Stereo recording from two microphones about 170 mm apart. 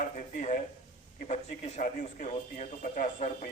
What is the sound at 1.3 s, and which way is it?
A man's voice, 45° left (ahead or behind).